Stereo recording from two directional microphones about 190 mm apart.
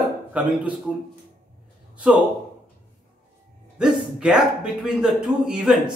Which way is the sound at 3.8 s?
5° right (ahead or behind).